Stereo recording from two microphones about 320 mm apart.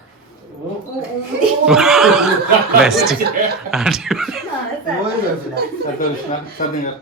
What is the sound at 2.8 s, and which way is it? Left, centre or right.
Speech, centre.